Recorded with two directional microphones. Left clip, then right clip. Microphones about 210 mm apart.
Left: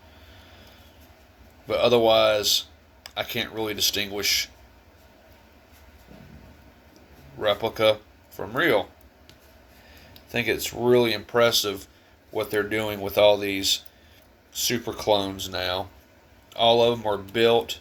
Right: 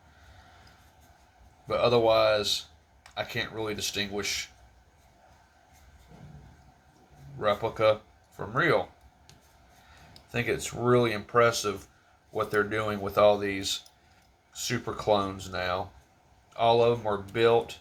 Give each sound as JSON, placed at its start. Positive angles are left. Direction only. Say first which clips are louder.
{"t": 1.6, "sound": "speech", "louder": "left 4 dB", "side_deg": 25}
{"t": 7.3, "sound": "speech", "louder": "left 3 dB", "side_deg": 25}
{"t": 10.3, "sound": "speech", "louder": "left 5 dB", "side_deg": 15}
{"t": 14.6, "sound": "speech", "louder": "left 5 dB", "side_deg": 20}